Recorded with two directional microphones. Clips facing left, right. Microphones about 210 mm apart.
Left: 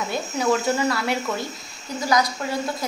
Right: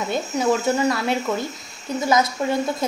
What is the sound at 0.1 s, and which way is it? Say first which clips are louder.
A woman's voice: right 2 dB; 20° right (ahead or behind).